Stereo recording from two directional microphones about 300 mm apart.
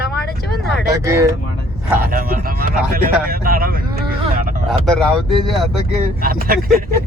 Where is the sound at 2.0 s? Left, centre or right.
Right.